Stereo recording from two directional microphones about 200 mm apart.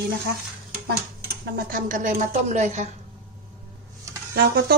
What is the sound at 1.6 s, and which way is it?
Speech, 45° right (ahead or behind).